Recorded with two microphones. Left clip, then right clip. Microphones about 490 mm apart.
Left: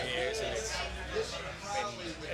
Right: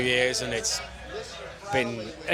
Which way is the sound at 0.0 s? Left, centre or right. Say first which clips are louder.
Right 9 dB; right.